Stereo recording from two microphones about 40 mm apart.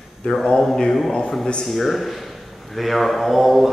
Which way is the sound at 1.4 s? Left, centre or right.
Centre.